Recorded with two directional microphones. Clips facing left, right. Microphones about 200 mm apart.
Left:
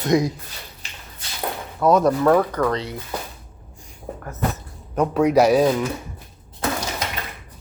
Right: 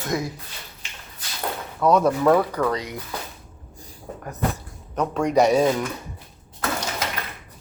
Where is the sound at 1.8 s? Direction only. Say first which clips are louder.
Left 1 dB; centre (ahead or behind).